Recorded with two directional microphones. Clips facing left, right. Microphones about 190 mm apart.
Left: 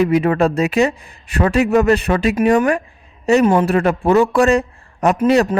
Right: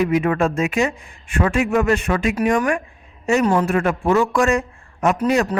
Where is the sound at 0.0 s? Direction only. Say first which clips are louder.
Left 3 dB; 35° left (ahead or behind).